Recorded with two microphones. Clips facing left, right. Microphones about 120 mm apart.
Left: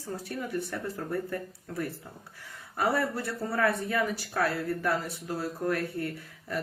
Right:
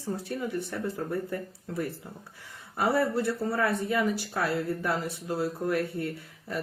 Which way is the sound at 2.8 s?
25° right (ahead or behind).